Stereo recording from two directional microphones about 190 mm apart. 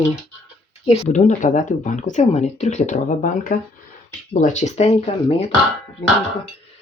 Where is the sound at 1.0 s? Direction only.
40° left (ahead or behind).